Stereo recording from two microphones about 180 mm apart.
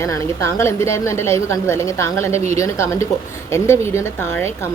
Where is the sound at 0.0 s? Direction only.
15° left (ahead or behind).